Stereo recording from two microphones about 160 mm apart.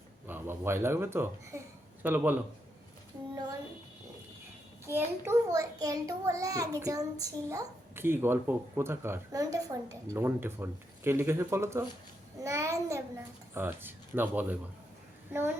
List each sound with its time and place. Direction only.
0.3 s speech: 15° right (ahead or behind)
4.9 s a child's voice: 15° right (ahead or behind)